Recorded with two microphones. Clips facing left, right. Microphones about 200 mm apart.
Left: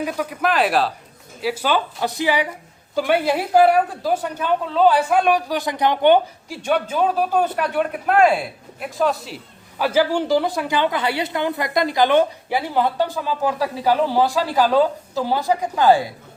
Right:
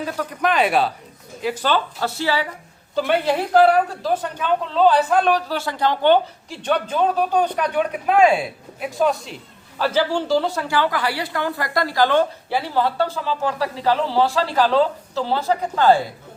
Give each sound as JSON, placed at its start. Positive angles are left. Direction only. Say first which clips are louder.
{"t": 0.0, "sound": "a woman's voice", "louder": "left 1 dB", "side_deg": 10}
{"t": 9.7, "sound": "a woman's voice", "louder": "left 2 dB", "side_deg": 10}